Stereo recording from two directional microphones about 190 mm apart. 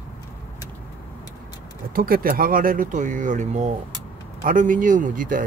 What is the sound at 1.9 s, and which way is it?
Speech, 50° right (ahead or behind).